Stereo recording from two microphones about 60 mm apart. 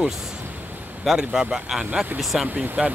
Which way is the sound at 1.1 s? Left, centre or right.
Centre.